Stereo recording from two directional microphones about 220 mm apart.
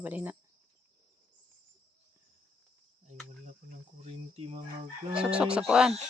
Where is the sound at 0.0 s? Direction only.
10° right (ahead or behind).